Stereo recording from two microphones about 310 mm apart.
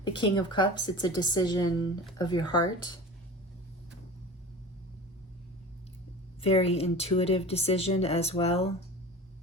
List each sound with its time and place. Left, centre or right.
0.0 s speech: centre
6.4 s speech: centre